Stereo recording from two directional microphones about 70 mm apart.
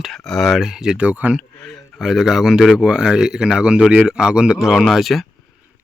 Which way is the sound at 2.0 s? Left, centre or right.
Centre.